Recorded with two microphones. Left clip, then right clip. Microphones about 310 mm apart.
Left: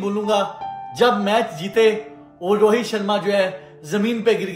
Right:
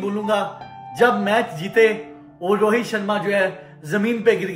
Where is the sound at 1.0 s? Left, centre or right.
Centre.